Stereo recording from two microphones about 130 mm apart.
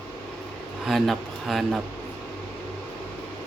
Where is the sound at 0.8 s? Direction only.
Centre (ahead or behind).